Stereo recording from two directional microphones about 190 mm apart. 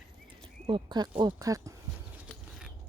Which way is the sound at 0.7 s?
25° right (ahead or behind).